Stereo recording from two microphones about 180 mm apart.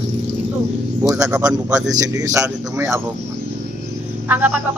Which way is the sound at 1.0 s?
20° right (ahead or behind).